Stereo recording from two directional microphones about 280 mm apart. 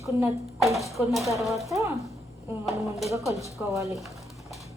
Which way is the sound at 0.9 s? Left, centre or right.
Centre.